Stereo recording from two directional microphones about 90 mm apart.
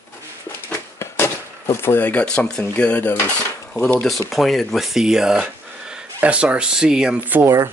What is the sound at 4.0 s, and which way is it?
Speech, centre (ahead or behind).